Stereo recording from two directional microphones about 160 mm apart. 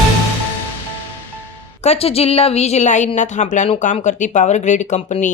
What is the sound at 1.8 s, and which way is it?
Speech, 40° left (ahead or behind).